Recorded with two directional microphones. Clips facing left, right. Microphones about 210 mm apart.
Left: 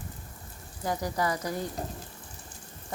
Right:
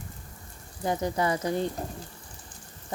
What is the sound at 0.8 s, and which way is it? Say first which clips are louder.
Speech: right 3 dB; 25° right (ahead or behind).